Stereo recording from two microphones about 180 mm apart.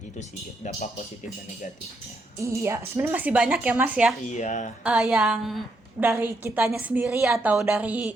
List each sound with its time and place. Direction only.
0.2 s speech: 40° left (ahead or behind)
2.4 s a woman's voice: 15° right (ahead or behind)
4.3 s speech: 40° left (ahead or behind)
4.8 s a woman's voice: 5° right (ahead or behind)